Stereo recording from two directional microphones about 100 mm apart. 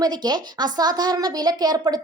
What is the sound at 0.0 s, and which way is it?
A woman's voice, 45° right (ahead or behind).